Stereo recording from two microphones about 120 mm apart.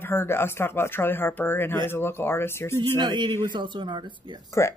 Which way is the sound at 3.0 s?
40° right (ahead or behind).